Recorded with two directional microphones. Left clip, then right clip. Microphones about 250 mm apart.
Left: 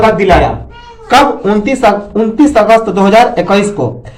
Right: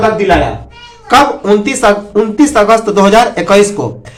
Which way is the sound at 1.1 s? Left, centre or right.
Centre.